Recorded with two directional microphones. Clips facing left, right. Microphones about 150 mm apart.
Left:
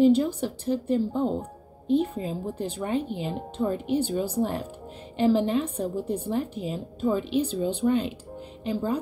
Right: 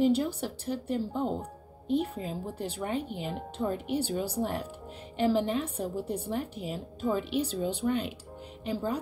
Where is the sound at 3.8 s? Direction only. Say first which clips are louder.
Left 5 dB; 10° right (ahead or behind).